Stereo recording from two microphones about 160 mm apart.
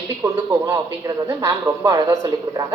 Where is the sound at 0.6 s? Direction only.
20° right (ahead or behind).